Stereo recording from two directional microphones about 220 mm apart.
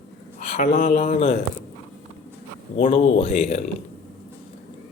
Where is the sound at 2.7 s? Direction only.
30° left (ahead or behind).